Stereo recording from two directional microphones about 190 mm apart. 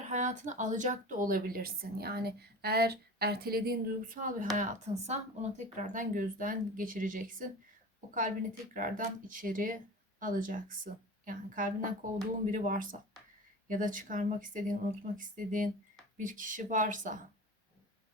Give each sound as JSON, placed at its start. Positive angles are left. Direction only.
{"t": 0.1, "sound": "speech", "side_deg": -40}
{"t": 8.7, "sound": "speech", "side_deg": -45}